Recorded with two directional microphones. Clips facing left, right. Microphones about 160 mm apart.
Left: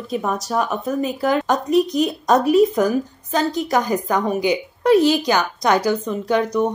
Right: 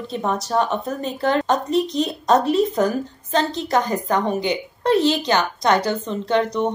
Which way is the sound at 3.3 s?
10° left (ahead or behind).